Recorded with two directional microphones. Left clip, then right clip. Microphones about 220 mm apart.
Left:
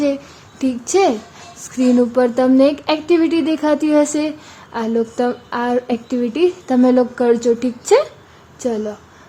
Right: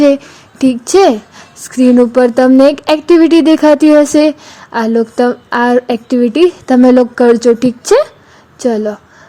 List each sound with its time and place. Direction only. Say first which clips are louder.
0.6 s a woman's voice: right 7 dB; 30° right (ahead or behind)